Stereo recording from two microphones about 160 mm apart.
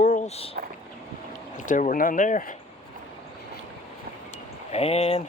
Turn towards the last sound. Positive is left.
turn(degrees=40)  # may be behind; listen again after turning